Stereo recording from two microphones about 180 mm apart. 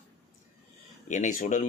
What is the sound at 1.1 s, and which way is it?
Speech, 40° left (ahead or behind).